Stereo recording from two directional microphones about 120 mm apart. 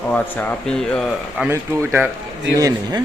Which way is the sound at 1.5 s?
20° right (ahead or behind).